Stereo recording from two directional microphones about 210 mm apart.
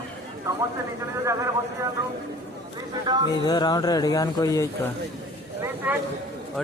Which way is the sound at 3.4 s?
20° left (ahead or behind).